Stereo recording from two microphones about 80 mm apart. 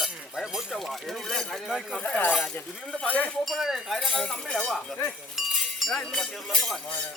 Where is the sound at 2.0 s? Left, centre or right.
Centre.